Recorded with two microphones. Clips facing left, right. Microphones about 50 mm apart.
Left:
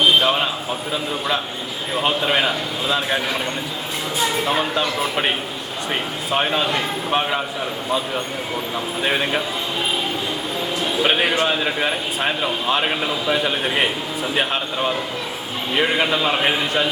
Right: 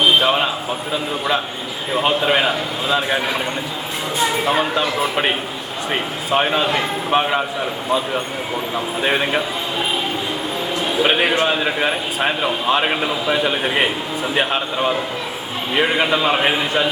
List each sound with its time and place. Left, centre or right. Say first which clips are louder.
0.0 s a sound: right 1 dB; centre
1.9 s a man's voice: right 3 dB; centre
4.2 s a man's voice: right 3 dB; centre
10.8 s a man's voice: right 2 dB; centre